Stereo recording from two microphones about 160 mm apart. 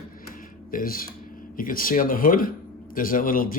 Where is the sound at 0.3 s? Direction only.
60° left (ahead or behind).